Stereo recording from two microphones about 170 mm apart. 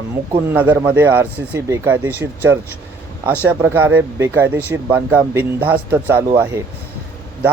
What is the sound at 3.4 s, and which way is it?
Speech, 10° right (ahead or behind).